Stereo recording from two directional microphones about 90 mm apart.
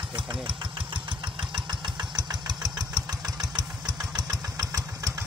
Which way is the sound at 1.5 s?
50° right (ahead or behind).